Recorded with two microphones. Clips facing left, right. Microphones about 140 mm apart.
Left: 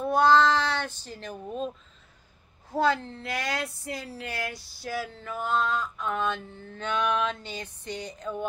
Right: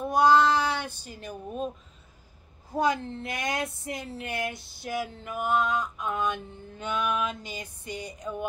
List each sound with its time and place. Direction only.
0.0 s speech: 10° right (ahead or behind)
2.7 s speech: 15° right (ahead or behind)